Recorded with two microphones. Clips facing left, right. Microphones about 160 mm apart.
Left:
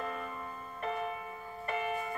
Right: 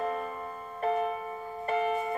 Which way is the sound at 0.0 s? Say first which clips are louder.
Right 6 dB; 35° right (ahead or behind).